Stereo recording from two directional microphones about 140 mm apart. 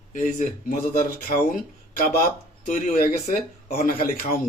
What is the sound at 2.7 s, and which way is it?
Speech, 65° left (ahead or behind).